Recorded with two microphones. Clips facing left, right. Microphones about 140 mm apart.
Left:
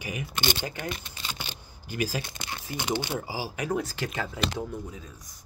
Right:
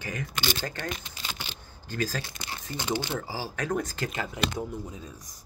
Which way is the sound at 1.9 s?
10° left (ahead or behind).